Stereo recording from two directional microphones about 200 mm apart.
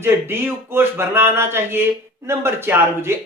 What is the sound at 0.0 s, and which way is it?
Speech, 10° right (ahead or behind).